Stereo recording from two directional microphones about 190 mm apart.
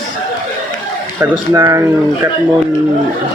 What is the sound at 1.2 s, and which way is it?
Speech, 15° right (ahead or behind).